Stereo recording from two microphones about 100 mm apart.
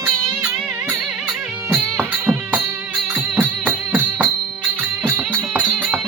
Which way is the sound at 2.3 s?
5° right (ahead or behind).